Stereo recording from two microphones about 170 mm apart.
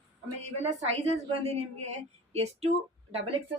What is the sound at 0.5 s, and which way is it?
A woman's voice, 40° right (ahead or behind).